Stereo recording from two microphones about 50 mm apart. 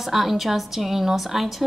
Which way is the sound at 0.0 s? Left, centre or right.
Centre.